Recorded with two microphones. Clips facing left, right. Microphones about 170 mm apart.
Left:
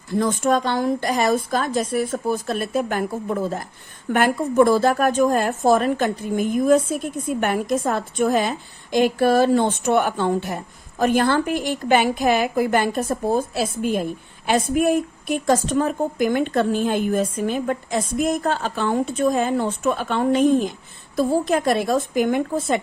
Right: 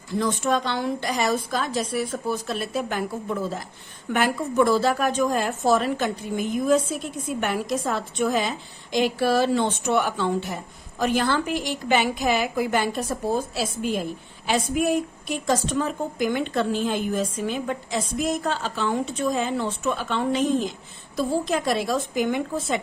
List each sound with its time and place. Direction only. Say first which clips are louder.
0.1 s a woman's voice: left 4 dB; 50° left (ahead or behind)